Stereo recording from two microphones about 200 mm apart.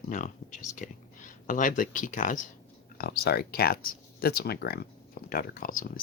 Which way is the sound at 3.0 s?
50° left (ahead or behind).